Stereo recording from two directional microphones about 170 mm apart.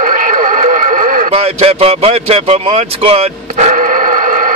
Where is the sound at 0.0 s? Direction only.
50° right (ahead or behind).